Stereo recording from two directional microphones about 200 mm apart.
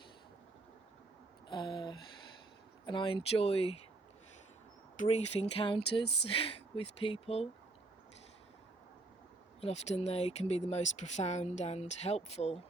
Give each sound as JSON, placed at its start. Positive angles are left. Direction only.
{"t": 1.5, "sound": "a sound", "side_deg": 20}
{"t": 2.8, "sound": "speech", "side_deg": 25}
{"t": 4.9, "sound": "speech", "side_deg": 35}
{"t": 9.6, "sound": "speech", "side_deg": 30}